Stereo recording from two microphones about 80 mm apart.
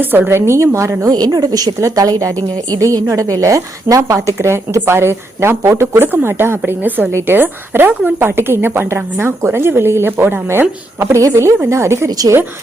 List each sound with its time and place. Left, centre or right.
0.0 s speech: right
1.1 s a woman's voice: right
7.1 s speech: right
7.3 s a woman's voice: right
12.1 s a woman's voice: right